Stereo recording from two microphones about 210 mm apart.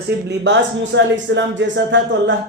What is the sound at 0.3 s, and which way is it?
Speech, 60° right (ahead or behind).